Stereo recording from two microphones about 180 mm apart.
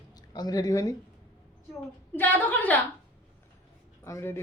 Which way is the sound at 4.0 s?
15° left (ahead or behind).